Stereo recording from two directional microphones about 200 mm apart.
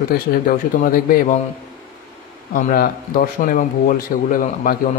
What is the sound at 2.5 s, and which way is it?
Speech, 45° left (ahead or behind).